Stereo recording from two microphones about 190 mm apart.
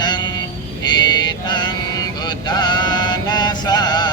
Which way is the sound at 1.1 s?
20° left (ahead or behind).